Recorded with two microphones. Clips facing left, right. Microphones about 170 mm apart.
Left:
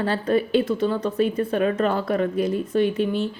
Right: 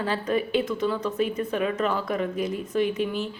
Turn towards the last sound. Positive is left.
turn(degrees=30)  # may be behind; listen again after turning